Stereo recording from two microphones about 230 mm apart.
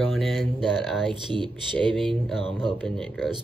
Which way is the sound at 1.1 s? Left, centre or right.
Right.